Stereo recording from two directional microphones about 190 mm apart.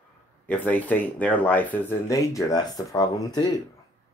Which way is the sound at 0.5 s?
10° left (ahead or behind).